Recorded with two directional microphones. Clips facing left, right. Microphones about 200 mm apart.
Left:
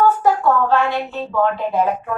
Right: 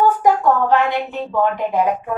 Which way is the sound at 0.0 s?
15° right (ahead or behind).